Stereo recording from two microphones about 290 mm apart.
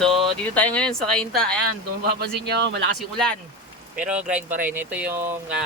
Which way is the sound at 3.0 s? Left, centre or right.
Centre.